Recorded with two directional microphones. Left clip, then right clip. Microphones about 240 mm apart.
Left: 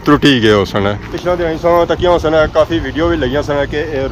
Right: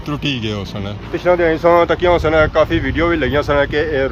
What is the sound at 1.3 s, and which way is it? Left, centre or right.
Speech, centre.